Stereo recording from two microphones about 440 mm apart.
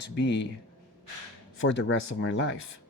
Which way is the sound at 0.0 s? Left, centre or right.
Left.